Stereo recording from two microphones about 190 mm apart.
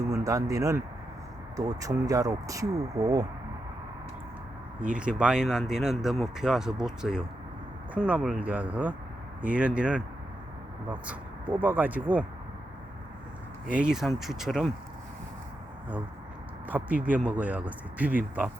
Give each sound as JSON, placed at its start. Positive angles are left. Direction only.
{"t": 0.1, "sound": "speech", "side_deg": -15}
{"t": 4.8, "sound": "speech", "side_deg": -5}
{"t": 13.7, "sound": "speech", "side_deg": -5}
{"t": 16.6, "sound": "speech", "side_deg": -10}